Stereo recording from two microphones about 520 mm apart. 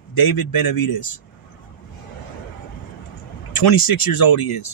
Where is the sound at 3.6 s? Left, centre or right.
Left.